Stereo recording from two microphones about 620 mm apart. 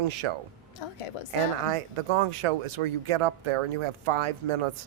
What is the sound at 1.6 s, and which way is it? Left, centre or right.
Speech, right.